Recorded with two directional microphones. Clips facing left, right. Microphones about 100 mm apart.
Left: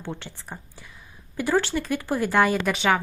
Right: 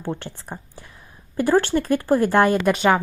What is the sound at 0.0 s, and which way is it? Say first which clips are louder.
A woman's voice: right 6 dB; 50° right (ahead or behind).